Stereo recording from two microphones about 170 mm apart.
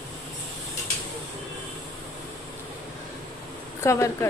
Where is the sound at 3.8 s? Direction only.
15° left (ahead or behind).